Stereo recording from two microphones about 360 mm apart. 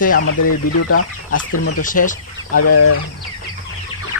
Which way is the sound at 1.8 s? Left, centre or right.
Left.